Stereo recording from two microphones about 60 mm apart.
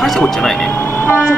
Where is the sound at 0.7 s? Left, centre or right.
Left.